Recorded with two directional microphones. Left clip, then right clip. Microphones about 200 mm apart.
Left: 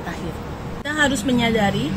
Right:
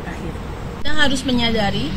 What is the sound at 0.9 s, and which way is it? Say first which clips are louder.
Speech: even; 20° left (ahead or behind).